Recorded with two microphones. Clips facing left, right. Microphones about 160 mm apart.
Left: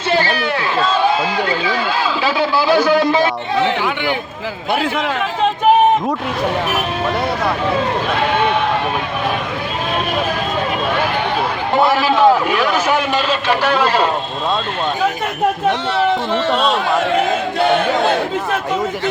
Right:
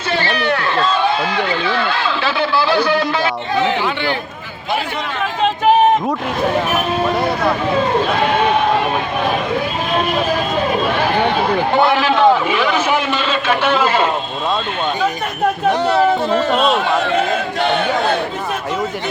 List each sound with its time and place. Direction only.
0.4 s a sound: 5° left (ahead or behind)
2.2 s a man's voice: 15° left (ahead or behind)
11.7 s a man's voice: centre (ahead or behind)
15.9 s speech: 40° right (ahead or behind)
16.5 s a man's voice: centre (ahead or behind)